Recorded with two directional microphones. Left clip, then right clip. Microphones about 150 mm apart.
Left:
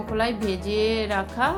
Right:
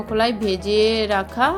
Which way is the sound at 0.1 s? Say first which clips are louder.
Right 5 dB; 30° right (ahead or behind).